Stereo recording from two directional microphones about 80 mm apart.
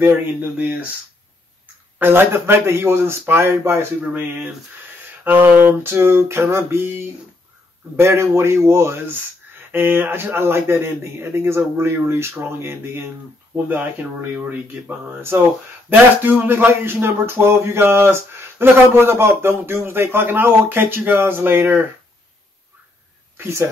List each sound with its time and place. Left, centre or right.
0.0 s speech: right
2.0 s a man's voice: right
23.3 s speech: right